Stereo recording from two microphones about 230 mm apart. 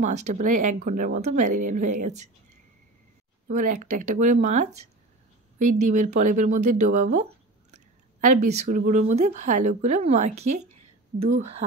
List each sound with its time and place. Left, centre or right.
0.0 s speech: right
3.4 s speech: right